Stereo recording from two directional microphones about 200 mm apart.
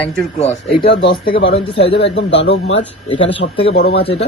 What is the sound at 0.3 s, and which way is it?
Speech, 30° left (ahead or behind).